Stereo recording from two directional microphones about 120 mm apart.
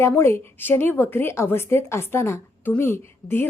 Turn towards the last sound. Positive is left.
turn(degrees=20)  # may be behind; listen again after turning